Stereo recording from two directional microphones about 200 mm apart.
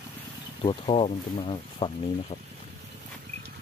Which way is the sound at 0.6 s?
25° left (ahead or behind).